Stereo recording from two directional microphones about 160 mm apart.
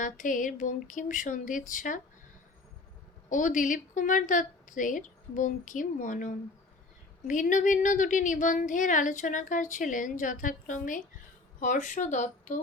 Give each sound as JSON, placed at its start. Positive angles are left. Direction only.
{"t": 0.0, "sound": "a woman's voice", "side_deg": 55}
{"t": 3.2, "sound": "a woman's voice", "side_deg": 55}